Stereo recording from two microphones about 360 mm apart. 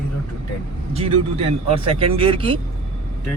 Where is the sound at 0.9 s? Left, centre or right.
Centre.